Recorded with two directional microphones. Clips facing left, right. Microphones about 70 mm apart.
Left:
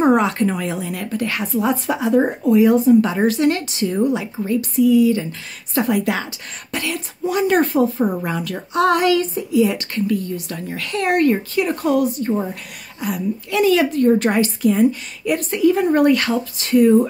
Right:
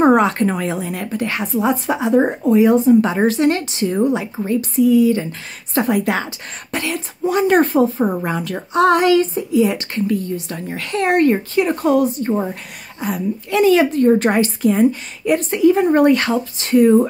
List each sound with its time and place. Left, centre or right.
0.0 s a woman's voice: right